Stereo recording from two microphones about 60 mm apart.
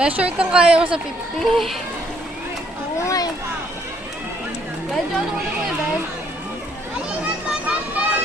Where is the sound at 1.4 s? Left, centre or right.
Centre.